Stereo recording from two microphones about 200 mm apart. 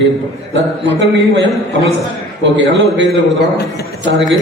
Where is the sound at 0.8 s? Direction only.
65° right (ahead or behind).